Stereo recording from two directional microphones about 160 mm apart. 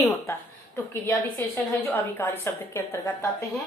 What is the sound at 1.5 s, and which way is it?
Speech, 10° left (ahead or behind).